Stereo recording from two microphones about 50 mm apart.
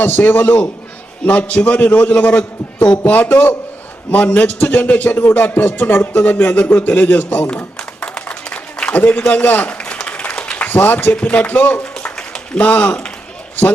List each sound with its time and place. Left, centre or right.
0.0 s a man's voice: left
8.3 s applause: left
9.0 s a man's voice: left
10.1 s applause: left
10.7 s a man's voice: left
12.1 s a sound: left